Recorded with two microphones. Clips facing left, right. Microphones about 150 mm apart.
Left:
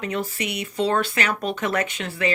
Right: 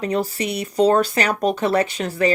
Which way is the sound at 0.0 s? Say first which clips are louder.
Right 5 dB; 35° right (ahead or behind).